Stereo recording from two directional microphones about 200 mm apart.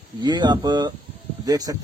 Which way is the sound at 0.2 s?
20° right (ahead or behind).